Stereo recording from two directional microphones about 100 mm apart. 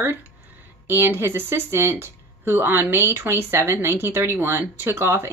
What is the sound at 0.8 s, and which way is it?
Speech, 20° right (ahead or behind).